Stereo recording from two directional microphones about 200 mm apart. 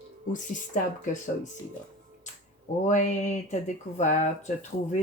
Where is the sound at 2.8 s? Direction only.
40° left (ahead or behind).